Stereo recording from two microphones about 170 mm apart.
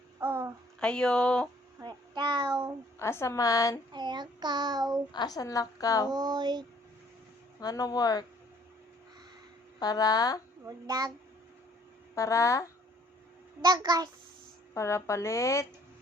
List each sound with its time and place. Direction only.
0.2 s a sound: 15° right (ahead or behind)
0.8 s speech: 5° left (ahead or behind)
1.8 s child singing: 25° right (ahead or behind)
3.0 s a woman's voice: 15° left (ahead or behind)
3.9 s a child's voice: 25° right (ahead or behind)
5.1 s a woman's voice: 25° left (ahead or behind)
6.1 s a child's voice: 25° right (ahead or behind)
7.6 s a woman's voice: 20° left (ahead or behind)
9.8 s a woman's voice: 20° left (ahead or behind)
10.7 s a child's voice: 20° right (ahead or behind)
12.1 s a woman's voice: 20° left (ahead or behind)
13.6 s a child's voice: 25° right (ahead or behind)
14.7 s speech: 15° left (ahead or behind)